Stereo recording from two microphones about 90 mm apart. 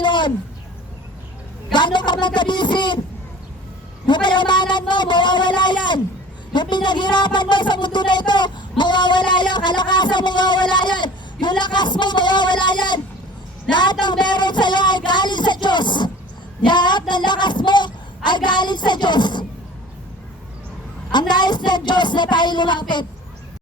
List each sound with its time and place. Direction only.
0.0 s a sound: 60° left (ahead or behind)
1.7 s a man's voice: 60° left (ahead or behind)
4.0 s a man's voice: 60° left (ahead or behind)
15.6 s a sound: 55° left (ahead or behind)
16.6 s a woman's voice: 55° left (ahead or behind)
21.1 s a man's voice: 55° left (ahead or behind)